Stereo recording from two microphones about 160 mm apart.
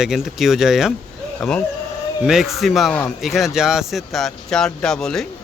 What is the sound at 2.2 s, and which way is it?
Speech, centre (ahead or behind).